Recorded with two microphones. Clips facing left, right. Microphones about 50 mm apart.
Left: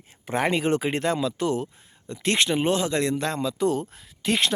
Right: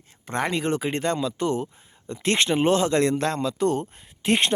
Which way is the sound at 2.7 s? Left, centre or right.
Centre.